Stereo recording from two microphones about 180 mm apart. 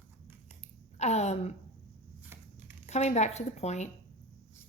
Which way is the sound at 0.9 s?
40° left (ahead or behind).